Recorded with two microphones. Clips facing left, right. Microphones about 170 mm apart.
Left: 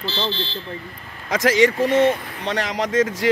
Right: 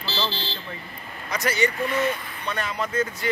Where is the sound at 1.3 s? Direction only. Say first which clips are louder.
Left 8 dB; 90° left.